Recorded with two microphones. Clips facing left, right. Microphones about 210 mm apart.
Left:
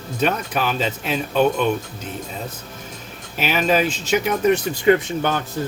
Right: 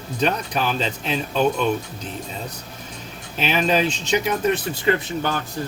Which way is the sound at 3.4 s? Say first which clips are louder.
Left 1 dB; 5° left (ahead or behind).